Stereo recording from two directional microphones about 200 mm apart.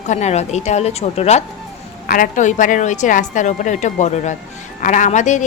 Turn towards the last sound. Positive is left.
turn(degrees=35)  # may be behind; listen again after turning